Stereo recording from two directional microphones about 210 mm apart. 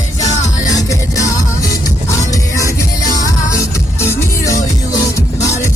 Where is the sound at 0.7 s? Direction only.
15° left (ahead or behind).